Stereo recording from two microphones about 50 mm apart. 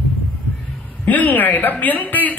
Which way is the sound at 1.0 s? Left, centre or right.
Left.